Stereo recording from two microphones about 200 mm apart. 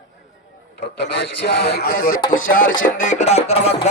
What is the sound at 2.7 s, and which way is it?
Music, 40° left (ahead or behind).